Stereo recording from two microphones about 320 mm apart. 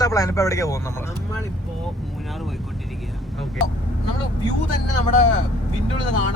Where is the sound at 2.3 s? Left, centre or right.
Centre.